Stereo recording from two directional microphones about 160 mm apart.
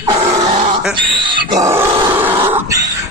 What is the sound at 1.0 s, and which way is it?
Grunt, 30° right (ahead or behind).